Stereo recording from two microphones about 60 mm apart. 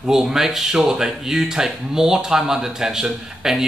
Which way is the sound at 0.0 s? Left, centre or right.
Centre.